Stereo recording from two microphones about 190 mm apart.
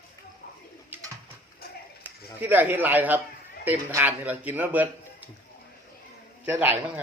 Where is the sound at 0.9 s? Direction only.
10° right (ahead or behind).